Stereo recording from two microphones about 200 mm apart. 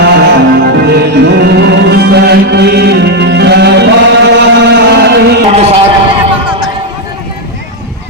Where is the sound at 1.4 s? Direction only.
55° right (ahead or behind).